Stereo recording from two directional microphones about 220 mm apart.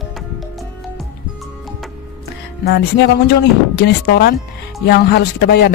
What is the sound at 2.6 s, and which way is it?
A man's voice, 50° left (ahead or behind).